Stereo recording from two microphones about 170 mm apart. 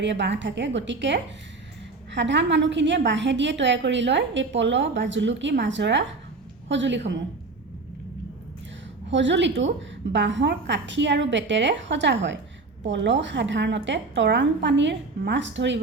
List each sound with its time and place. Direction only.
0.0 s a woman's voice: 90° right
9.0 s a woman's voice: 90° right